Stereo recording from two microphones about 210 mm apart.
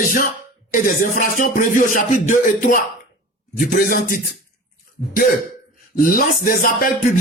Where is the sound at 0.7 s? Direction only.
40° left (ahead or behind).